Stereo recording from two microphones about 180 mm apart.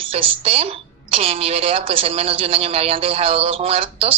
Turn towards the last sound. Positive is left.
turn(degrees=-35)  # may be behind; listen again after turning